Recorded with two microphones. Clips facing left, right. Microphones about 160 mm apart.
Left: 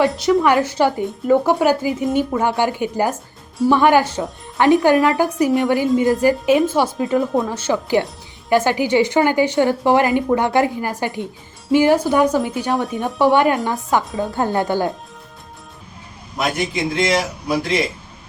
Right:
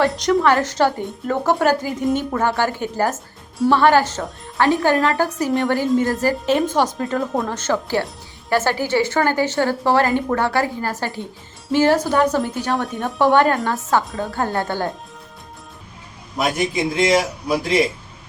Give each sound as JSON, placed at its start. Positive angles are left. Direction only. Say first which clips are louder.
{"t": 0.1, "sound": "a man's voice", "louder": "left 2 dB", "side_deg": 0}
{"t": 0.4, "sound": "a woman's voice", "louder": "left 1 dB", "side_deg": 10}
{"t": 5.5, "sound": "a man's voice", "louder": "left 2 dB", "side_deg": 0}
{"t": 13.3, "sound": "a woman's voice", "louder": "right 1 dB", "side_deg": 15}
{"t": 14.0, "sound": "a man's voice", "louder": "left 3 dB", "side_deg": 0}
{"t": 14.3, "sound": "speech", "louder": "left 4 dB", "side_deg": 20}
{"t": 16.4, "sound": "a man's voice", "louder": "right 1 dB", "side_deg": 0}